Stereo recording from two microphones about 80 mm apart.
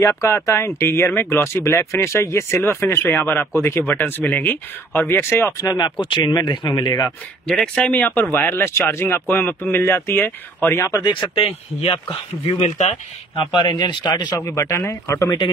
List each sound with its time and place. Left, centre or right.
0.0 s speech: left
5.6 s speech: left
6.8 s speech: left
7.1 s speech: centre
7.9 s speech: left
10.9 s speech: left
11.7 s speech: left
13.4 s speech: left
14.4 s speech: left